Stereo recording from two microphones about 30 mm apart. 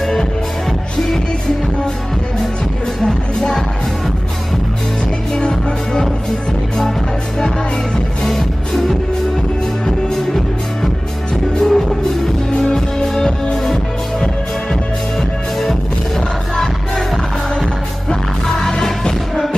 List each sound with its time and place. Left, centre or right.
0.0 s music: centre
3.0 s music: centre
5.4 s music: left
8.3 s music: centre
11.5 s music: centre
18.7 s music: left